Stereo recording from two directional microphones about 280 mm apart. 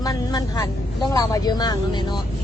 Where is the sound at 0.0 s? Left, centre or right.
Centre.